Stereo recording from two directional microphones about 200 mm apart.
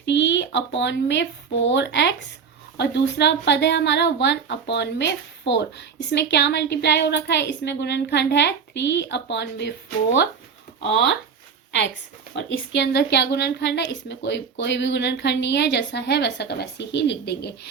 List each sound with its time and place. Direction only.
0.0 s a sound: 60° left (ahead or behind)
0.8 s a woman's voice: 60° left (ahead or behind)
12.3 s a woman's voice: 60° left (ahead or behind)